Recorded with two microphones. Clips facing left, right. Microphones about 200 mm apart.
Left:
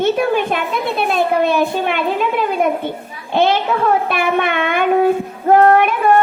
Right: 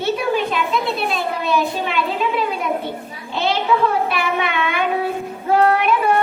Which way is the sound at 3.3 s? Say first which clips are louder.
Left 7 dB; 50° left (ahead or behind).